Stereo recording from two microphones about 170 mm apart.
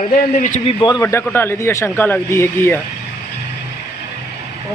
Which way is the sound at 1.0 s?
15° left (ahead or behind).